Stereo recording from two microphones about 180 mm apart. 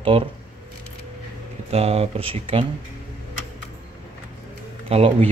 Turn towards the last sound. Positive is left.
turn(degrees=-30)  # may be behind; listen again after turning